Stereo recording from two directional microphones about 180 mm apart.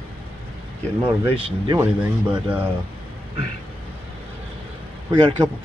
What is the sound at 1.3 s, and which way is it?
Speech, 30° right (ahead or behind).